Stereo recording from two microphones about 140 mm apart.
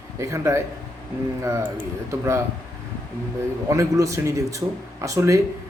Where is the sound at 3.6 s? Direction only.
20° right (ahead or behind).